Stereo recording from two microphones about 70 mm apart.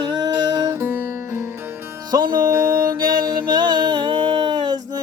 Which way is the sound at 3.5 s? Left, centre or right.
Right.